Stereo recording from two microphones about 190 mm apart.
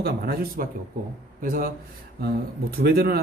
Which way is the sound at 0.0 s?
50° right (ahead or behind).